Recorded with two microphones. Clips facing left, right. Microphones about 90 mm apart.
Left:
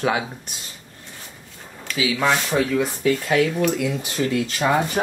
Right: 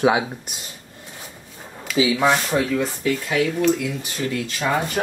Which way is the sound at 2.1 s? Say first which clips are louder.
Left 3 dB; 5° right (ahead or behind).